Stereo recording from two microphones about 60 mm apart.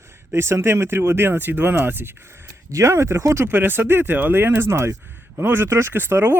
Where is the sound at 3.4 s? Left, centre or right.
Right.